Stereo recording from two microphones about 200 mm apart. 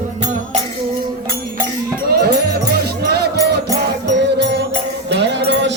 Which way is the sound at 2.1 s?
50° right (ahead or behind).